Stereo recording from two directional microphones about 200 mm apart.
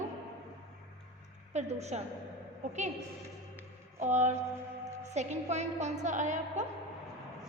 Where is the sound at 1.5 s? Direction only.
35° right (ahead or behind).